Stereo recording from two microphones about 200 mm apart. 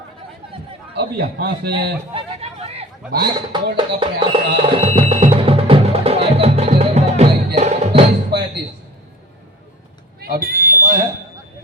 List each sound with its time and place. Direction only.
0.9 s speech: 50° right (ahead or behind)
2.1 s hubbub: 30° right (ahead or behind)
3.8 s music: 25° right (ahead or behind)
8.3 s a sound: 60° right (ahead or behind)
10.2 s smoke detector: 50° right (ahead or behind)